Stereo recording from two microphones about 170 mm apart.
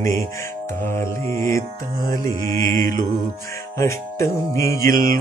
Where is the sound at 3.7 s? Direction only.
15° left (ahead or behind).